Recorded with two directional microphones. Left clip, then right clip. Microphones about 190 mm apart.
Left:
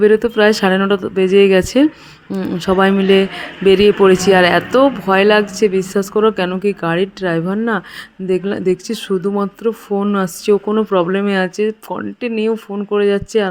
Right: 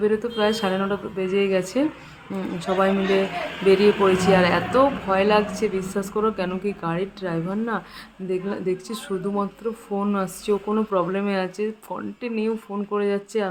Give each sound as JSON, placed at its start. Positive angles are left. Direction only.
{"t": 0.0, "sound": "speech", "side_deg": 45}